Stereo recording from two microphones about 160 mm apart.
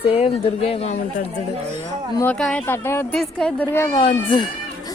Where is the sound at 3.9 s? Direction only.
35° left (ahead or behind).